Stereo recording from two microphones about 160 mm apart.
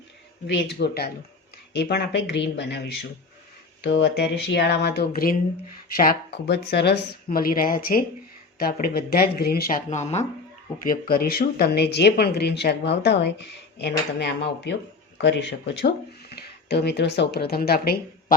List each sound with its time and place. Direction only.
0.4 s speech: 90° left; by 5.4 s 65° left (ahead or behind)
6.0 s speech: 75° left (ahead or behind); by 10.2 s 45° left (ahead or behind)
10.8 s speech: 70° left (ahead or behind)